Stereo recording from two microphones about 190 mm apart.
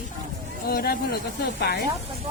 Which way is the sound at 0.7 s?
55° left (ahead or behind).